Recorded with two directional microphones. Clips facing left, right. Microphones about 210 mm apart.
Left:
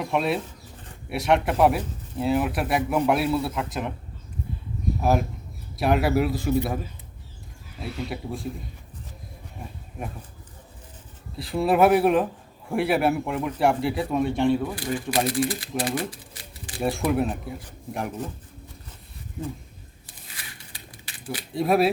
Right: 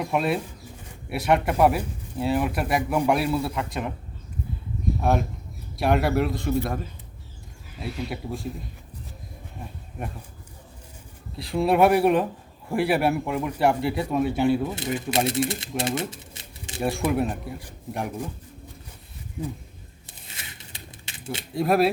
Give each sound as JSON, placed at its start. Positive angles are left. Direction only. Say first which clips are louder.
{"t": 0.0, "sound": "a man's voice", "louder": "even", "side_deg": 0}
{"t": 4.9, "sound": "a man's voice", "louder": "left 1 dB", "side_deg": 5}
{"t": 7.8, "sound": "a man's voice", "louder": "even", "side_deg": 0}
{"t": 10.0, "sound": "a man's voice", "louder": "even", "side_deg": 0}
{"t": 11.3, "sound": "a man's voice", "louder": "even", "side_deg": 0}
{"t": 14.6, "sound": "speech", "louder": "right 1 dB", "side_deg": -20}
{"t": 16.8, "sound": "a man's voice", "louder": "even", "side_deg": 0}
{"t": 20.2, "sound": "a sound", "louder": "right 1 dB", "side_deg": -25}
{"t": 21.5, "sound": "a man's voice", "louder": "even", "side_deg": 0}